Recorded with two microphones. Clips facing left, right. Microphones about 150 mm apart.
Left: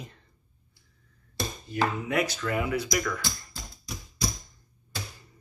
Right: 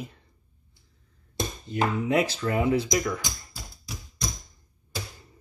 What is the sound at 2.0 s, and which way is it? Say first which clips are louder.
Speech: right 4 dB; 25° right (ahead or behind).